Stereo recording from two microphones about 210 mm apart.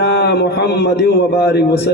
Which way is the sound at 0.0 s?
55° left (ahead or behind).